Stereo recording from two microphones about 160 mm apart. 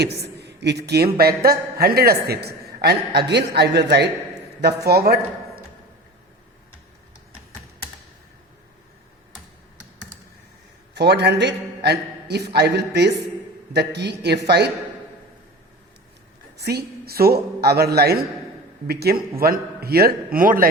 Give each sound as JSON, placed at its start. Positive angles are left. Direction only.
{"t": 0.0, "sound": "a woman's voice", "side_deg": -90}
{"t": 1.2, "sound": "a man's voice", "side_deg": -70}
{"t": 10.9, "sound": "a man's voice", "side_deg": -90}
{"t": 16.6, "sound": "a man's voice", "side_deg": -85}